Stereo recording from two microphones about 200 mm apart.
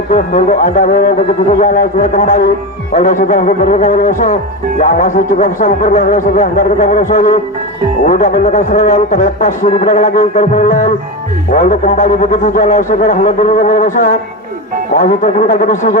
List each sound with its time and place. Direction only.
0.1 s a man's voice: 40° left (ahead or behind)